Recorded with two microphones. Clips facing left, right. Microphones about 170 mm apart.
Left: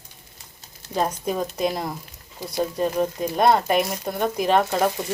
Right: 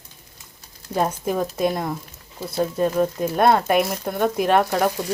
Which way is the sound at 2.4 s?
15° left (ahead or behind).